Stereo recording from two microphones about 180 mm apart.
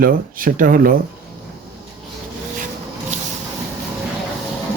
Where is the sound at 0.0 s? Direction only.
50° right (ahead or behind).